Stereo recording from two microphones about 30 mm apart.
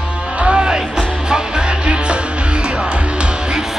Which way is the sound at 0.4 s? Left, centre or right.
Right.